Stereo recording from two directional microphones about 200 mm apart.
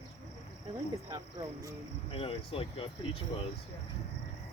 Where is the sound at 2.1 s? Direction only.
30° left (ahead or behind).